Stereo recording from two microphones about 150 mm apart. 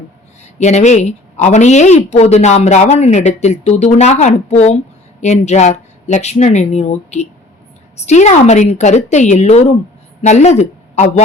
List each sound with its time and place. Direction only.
0.4 s a woman's voice: 50° left (ahead or behind)